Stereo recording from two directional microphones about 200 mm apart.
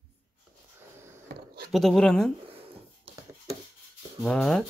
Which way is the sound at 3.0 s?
20° right (ahead or behind).